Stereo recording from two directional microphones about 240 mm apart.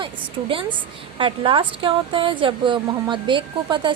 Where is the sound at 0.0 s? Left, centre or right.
Right.